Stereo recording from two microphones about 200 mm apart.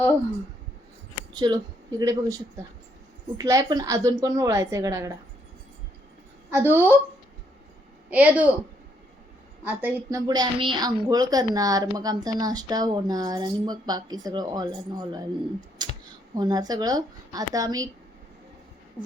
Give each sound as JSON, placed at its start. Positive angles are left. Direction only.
{"t": 1.3, "sound": "a woman's voice", "side_deg": -20}
{"t": 6.5, "sound": "a woman's voice", "side_deg": -10}
{"t": 8.1, "sound": "a woman's voice", "side_deg": -5}
{"t": 9.6, "sound": "a woman's voice", "side_deg": -15}